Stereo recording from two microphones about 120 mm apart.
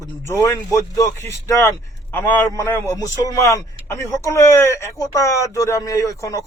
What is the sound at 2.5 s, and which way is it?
A man's voice, 25° left (ahead or behind).